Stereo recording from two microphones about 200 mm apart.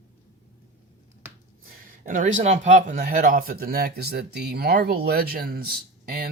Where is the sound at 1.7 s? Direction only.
40° right (ahead or behind).